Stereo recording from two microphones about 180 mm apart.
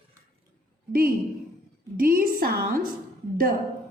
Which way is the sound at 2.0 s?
55° right (ahead or behind).